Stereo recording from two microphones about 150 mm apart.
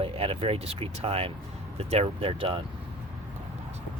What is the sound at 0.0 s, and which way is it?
Speech, 40° right (ahead or behind).